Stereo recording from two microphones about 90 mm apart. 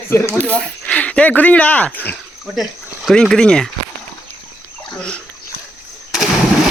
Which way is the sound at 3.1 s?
10° left (ahead or behind).